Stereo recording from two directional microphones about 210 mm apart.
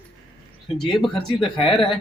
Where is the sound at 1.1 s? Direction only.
25° left (ahead or behind).